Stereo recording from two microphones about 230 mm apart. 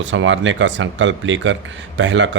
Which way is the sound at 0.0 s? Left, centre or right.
Right.